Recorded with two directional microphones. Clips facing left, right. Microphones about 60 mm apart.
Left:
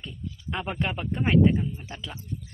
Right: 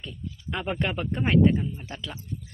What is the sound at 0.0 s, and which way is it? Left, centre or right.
Speech, centre.